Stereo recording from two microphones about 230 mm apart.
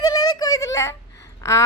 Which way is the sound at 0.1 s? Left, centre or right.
Centre.